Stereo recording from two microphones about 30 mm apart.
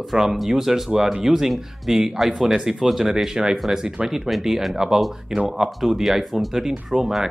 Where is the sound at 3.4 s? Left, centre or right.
Right.